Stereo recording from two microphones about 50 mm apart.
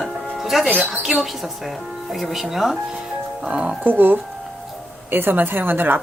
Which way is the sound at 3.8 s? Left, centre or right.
Right.